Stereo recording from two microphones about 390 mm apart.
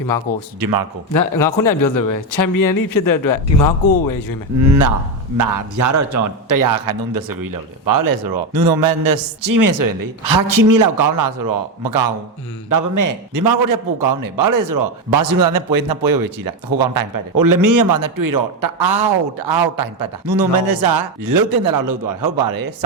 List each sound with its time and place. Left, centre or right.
0.6 s a man's voice: right
1.6 s a man's voice: left
4.6 s a man's voice: right
12.7 s a man's voice: right
18.9 s a man's voice: right